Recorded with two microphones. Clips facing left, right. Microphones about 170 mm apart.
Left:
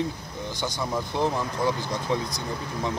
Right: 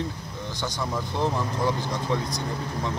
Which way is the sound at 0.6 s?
15° left (ahead or behind).